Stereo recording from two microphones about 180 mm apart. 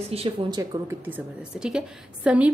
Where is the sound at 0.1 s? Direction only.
30° right (ahead or behind).